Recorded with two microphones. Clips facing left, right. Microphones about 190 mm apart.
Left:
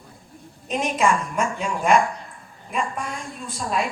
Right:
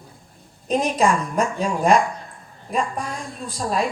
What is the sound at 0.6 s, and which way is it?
A woman's voice, 35° right (ahead or behind).